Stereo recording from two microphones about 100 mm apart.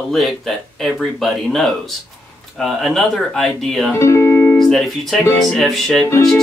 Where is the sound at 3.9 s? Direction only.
30° left (ahead or behind).